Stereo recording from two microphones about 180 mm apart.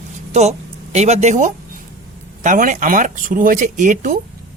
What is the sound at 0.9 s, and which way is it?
Speech, 40° right (ahead or behind).